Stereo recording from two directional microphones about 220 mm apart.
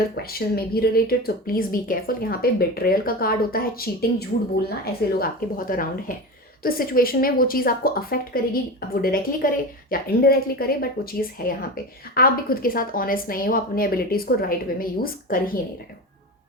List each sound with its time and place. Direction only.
0.2 s speech: 45° left (ahead or behind)